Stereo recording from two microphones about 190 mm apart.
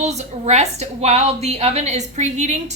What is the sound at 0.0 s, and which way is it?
A woman's voice, 35° right (ahead or behind).